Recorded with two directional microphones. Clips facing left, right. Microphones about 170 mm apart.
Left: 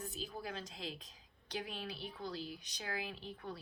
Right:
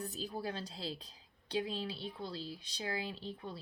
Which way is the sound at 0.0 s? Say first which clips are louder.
Right 4 dB; 35° right (ahead or behind).